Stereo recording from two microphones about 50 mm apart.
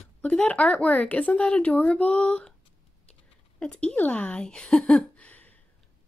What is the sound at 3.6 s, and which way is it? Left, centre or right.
Speech, centre.